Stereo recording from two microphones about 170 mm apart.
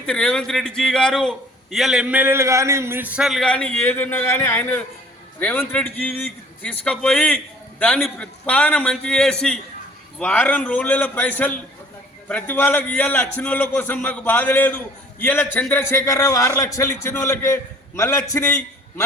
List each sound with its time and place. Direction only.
0.0 s a man's voice: 5° left (ahead or behind)